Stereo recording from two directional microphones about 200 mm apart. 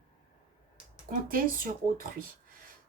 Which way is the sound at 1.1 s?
45° right (ahead or behind).